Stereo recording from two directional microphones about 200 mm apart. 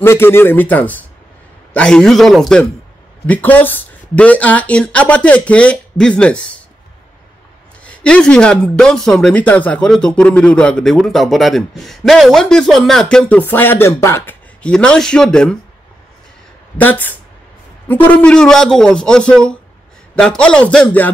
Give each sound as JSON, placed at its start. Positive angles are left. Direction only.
{"t": 0.0, "sound": "speech", "side_deg": 10}
{"t": 7.8, "sound": "speech", "side_deg": 5}
{"t": 16.7, "sound": "speech", "side_deg": 10}